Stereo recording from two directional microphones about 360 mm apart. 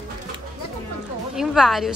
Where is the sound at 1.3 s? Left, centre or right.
Centre.